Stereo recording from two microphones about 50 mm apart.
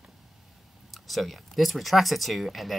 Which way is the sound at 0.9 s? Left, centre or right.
Centre.